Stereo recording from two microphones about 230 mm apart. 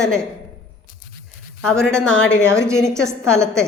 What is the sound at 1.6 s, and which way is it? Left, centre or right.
Speech, centre.